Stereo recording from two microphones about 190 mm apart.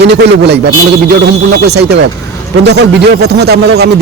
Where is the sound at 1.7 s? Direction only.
60° right (ahead or behind).